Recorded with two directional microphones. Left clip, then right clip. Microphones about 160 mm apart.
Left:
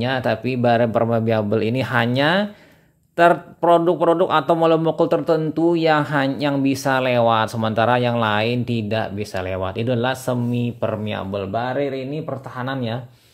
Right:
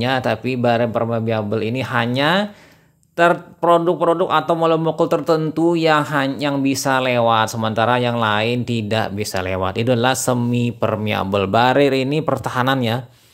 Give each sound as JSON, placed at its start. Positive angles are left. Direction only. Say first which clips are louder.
{"t": 0.0, "sound": "speech", "louder": "right 2 dB", "side_deg": -5}
{"t": 11.3, "sound": "speech", "louder": "right 9 dB", "side_deg": -35}
{"t": 12.6, "sound": "speech", "louder": "right 4 dB", "side_deg": -25}